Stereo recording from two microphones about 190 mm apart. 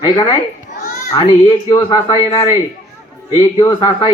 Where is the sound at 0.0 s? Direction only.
25° left (ahead or behind).